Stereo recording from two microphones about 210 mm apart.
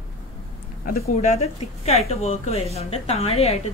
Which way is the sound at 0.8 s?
45° left (ahead or behind).